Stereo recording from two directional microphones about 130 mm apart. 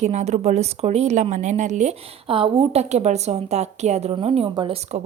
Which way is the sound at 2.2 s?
45° right (ahead or behind).